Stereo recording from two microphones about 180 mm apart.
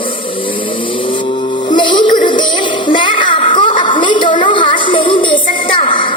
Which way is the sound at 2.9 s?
25° left (ahead or behind).